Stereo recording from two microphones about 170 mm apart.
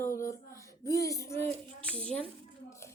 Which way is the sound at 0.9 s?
20° left (ahead or behind).